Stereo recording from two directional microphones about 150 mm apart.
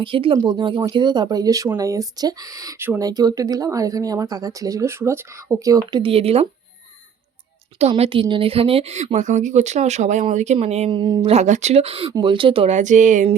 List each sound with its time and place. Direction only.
0.0 s speech: 35° right (ahead or behind); by 3.1 s 15° right (ahead or behind)
3.1 s speech: 25° right (ahead or behind); by 6.5 s 40° right (ahead or behind)
7.8 s a woman's voice: 45° right (ahead or behind)
10.9 s speech: 30° right (ahead or behind)
11.3 s a woman's voice: 50° right (ahead or behind)
12.7 s a sound: 55° right (ahead or behind)